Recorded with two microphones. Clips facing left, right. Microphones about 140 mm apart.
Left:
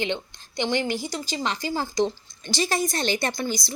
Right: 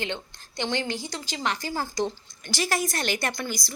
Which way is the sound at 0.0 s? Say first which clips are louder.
Left 4 dB; 15° left (ahead or behind).